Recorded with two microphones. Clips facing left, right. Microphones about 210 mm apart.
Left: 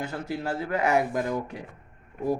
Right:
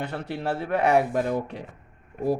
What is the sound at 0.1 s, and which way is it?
Speech, 30° right (ahead or behind).